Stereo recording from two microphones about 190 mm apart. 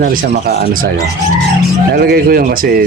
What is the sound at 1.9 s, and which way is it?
Speech, 50° right (ahead or behind).